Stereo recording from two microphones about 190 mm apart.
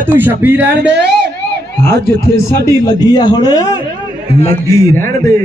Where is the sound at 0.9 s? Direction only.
60° right (ahead or behind).